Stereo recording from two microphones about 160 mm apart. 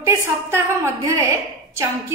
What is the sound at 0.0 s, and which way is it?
A woman's voice, 15° right (ahead or behind).